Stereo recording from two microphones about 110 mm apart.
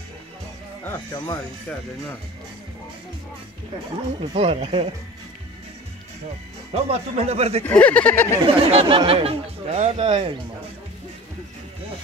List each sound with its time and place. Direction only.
1.1 s speech: 35° left (ahead or behind)
4.3 s speech: 70° right (ahead or behind)
6.7 s speech: 70° right (ahead or behind)
7.6 s speech: 15° left (ahead or behind)
8.5 s speech: 60° right (ahead or behind)